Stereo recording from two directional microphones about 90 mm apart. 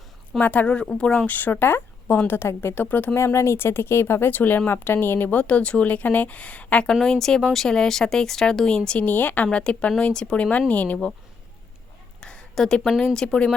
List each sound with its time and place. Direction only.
0.3 s speech: 15° left (ahead or behind)
3.2 s speech: 30° left (ahead or behind); by 11.1 s 15° left (ahead or behind)
12.2 s a sound: 10° left (ahead or behind)
13.1 s speech: 10° left (ahead or behind)